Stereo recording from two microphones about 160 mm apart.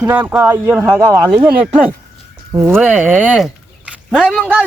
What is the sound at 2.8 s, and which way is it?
Speech, 10° right (ahead or behind).